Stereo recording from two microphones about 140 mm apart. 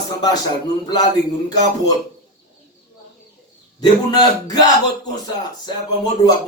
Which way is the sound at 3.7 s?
30° left (ahead or behind).